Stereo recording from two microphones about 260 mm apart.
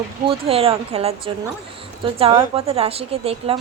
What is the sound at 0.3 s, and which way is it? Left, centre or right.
Speech, right.